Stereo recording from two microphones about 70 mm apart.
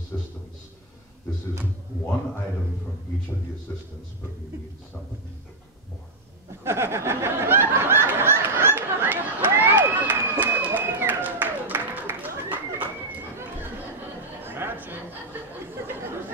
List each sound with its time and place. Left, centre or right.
6.6 s snicker: right
14.4 s chatter: right
15.3 s a sound: right